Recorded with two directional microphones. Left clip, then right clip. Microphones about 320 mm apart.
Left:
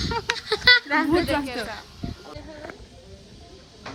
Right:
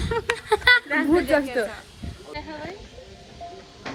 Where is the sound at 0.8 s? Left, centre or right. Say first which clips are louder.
Left 1 dB; left.